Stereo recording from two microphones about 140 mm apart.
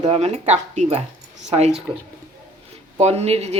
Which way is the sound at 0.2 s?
55° right (ahead or behind).